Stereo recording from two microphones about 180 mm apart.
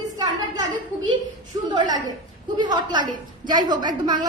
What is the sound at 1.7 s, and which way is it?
A woman's voice, 25° right (ahead or behind).